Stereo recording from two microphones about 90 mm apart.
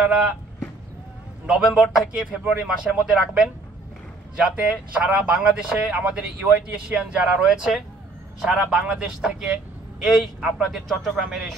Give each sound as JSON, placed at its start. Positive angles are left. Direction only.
{"t": 1.4, "sound": "a man's voice", "side_deg": -10}